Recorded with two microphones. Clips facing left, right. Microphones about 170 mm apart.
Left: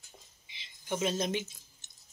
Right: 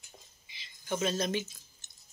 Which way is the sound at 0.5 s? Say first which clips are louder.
Right 1 dB; 20° left (ahead or behind).